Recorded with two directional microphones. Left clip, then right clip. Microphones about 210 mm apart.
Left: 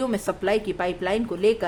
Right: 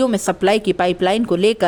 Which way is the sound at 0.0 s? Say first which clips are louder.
Right 8 dB; 30° right (ahead or behind).